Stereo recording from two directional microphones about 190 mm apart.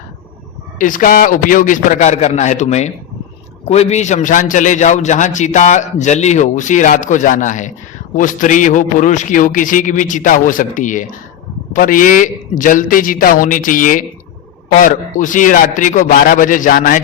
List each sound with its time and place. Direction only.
0.8 s a man's voice: 45° left (ahead or behind)